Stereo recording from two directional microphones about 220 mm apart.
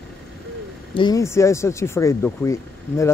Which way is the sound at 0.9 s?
20° left (ahead or behind).